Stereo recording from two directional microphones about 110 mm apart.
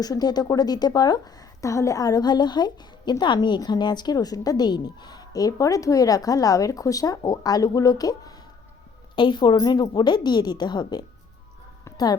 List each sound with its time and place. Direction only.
0.0 s a woman's voice: 35° left (ahead or behind)
9.1 s a woman's voice: 45° left (ahead or behind)
11.9 s a sound: 35° left (ahead or behind)